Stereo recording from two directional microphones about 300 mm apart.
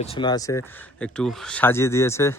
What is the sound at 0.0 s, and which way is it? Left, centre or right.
A woman's voice, centre.